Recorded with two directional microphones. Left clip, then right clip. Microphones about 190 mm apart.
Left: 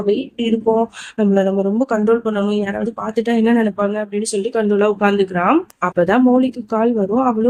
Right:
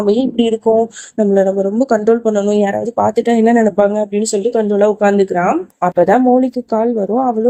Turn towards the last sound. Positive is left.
turn(degrees=-15)  # may be behind; listen again after turning